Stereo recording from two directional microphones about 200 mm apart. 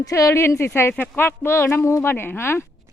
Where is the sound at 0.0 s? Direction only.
15° left (ahead or behind).